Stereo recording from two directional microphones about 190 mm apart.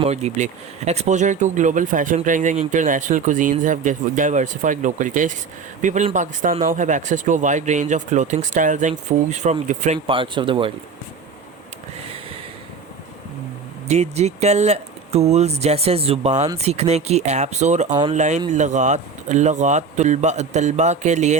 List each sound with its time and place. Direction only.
0.0 s speech: 35° right (ahead or behind)
10.1 s speech: 25° right (ahead or behind)
13.8 s speech: 35° right (ahead or behind)